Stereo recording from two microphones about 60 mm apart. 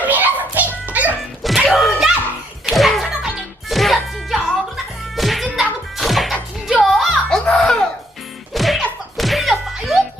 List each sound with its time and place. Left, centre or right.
0.0 s music: right
1.4 s music: centre
1.6 s a sound: centre
2.6 s slap: centre
3.7 s music: centre
7.3 s music: centre